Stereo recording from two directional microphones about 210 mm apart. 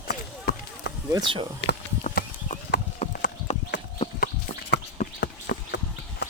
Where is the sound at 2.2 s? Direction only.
40° left (ahead or behind).